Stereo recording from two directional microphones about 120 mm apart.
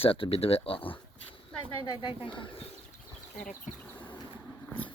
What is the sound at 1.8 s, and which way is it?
Speech, 40° left (ahead or behind).